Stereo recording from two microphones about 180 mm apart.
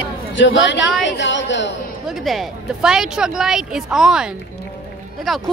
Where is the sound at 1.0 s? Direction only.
85° left.